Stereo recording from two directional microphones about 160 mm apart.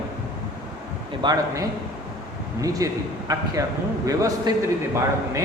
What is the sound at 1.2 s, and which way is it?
A man's voice, 25° right (ahead or behind).